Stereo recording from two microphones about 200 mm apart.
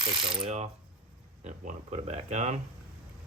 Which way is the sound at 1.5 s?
35° right (ahead or behind).